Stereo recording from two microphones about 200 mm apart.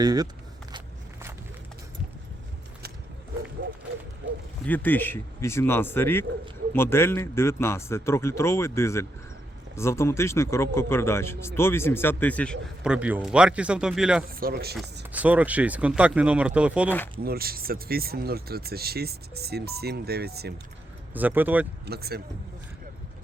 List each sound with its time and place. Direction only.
0.0 s speech: 20° right (ahead or behind)
4.6 s a man's voice: 10° left (ahead or behind)
14.3 s speech: 50° right (ahead or behind)
15.1 s speech: 5° right (ahead or behind)
17.2 s speech: 50° right (ahead or behind)
21.1 s speech: 10° right (ahead or behind)
21.8 s speech: 50° right (ahead or behind)